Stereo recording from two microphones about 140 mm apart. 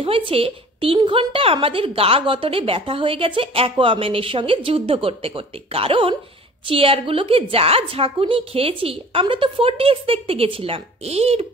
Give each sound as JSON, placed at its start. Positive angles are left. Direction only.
{"t": 0.0, "sound": "a woman's voice", "side_deg": -40}